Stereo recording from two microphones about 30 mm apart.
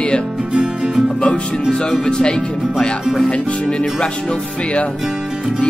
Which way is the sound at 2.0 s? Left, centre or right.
Left.